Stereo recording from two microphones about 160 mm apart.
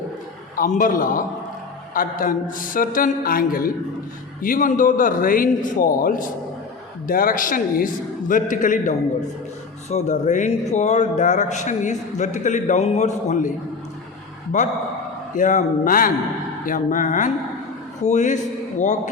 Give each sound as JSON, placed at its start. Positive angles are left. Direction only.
{"t": 0.5, "sound": "a man's voice", "side_deg": 60}
{"t": 14.5, "sound": "a man's voice", "side_deg": 50}